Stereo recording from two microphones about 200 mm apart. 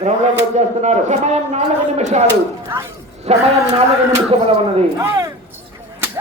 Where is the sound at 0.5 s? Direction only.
35° right (ahead or behind).